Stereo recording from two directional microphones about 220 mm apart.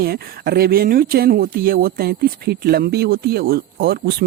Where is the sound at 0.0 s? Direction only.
45° right (ahead or behind).